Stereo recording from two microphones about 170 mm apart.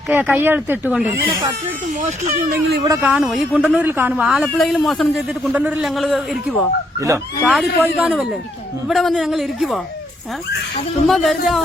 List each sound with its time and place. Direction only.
0.1 s speech: 10° right (ahead or behind)
2.0 s speech: 45° right (ahead or behind)
2.5 s speech: 65° right (ahead or behind)
3.0 s a man's voice: 5° right (ahead or behind)
4.1 s a man's voice: centre (ahead or behind)
11.0 s a man's voice: centre (ahead or behind)